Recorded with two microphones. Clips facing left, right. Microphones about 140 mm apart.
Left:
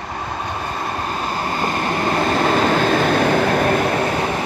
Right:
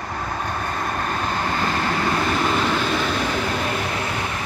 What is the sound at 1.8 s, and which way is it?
Vehicle, 35° left (ahead or behind).